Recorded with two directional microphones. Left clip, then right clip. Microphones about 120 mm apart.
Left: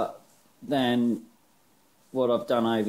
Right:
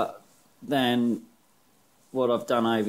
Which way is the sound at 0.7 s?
5° right (ahead or behind).